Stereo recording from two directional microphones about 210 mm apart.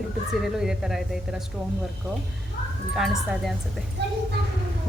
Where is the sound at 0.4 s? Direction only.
5° right (ahead or behind).